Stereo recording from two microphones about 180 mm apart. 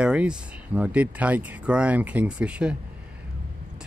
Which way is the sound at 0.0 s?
5° right (ahead or behind).